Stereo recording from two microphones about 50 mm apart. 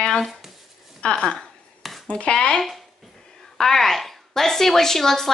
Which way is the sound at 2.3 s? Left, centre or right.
Centre.